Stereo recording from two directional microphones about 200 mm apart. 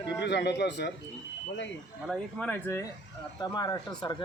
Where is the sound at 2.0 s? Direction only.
5° left (ahead or behind).